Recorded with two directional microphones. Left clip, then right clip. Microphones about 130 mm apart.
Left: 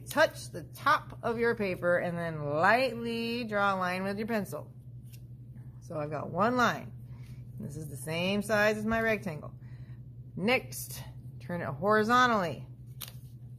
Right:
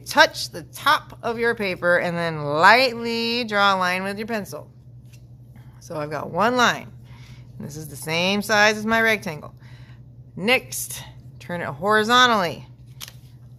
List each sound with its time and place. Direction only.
0.1 s a woman's voice: 20° right (ahead or behind)
1.8 s speech: 30° right (ahead or behind); by 4.6 s 5° left (ahead or behind)
5.9 s a woman's voice: 15° right (ahead or behind)